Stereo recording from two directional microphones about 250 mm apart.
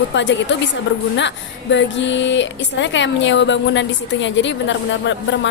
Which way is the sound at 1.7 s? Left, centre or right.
Left.